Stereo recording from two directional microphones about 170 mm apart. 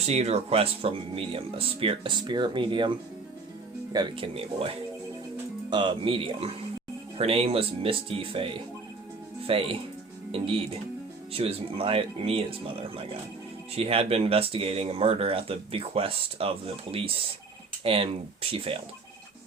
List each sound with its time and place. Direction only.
0.0 s speech: 40° right (ahead or behind)
3.9 s speech: 30° right (ahead or behind)
5.7 s speech: 30° right (ahead or behind)